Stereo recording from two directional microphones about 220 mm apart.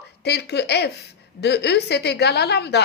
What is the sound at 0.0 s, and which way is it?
A woman's voice, 50° left (ahead or behind).